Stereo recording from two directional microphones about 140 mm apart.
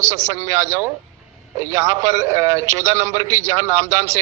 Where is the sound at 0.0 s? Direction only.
20° right (ahead or behind).